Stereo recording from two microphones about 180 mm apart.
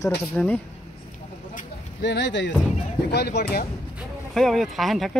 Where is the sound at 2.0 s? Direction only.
75° left (ahead or behind).